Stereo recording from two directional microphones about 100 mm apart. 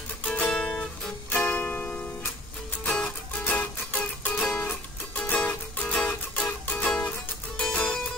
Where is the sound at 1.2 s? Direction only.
20° left (ahead or behind).